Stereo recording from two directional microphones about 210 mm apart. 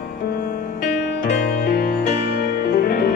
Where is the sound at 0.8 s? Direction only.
45° left (ahead or behind).